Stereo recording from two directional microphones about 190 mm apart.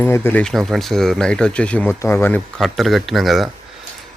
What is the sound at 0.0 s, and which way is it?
Speech, 10° left (ahead or behind).